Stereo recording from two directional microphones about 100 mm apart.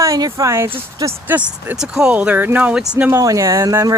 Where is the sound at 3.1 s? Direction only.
30° right (ahead or behind).